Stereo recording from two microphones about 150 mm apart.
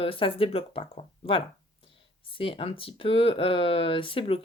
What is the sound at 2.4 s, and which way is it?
Speech, 35° left (ahead or behind).